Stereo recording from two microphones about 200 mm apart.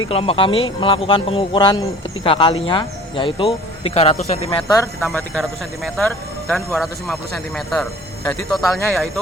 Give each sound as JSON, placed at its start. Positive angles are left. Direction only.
{"t": 0.1, "sound": "speech", "side_deg": 30}
{"t": 4.5, "sound": "speech", "side_deg": 15}
{"t": 5.1, "sound": "a man's voice", "side_deg": 0}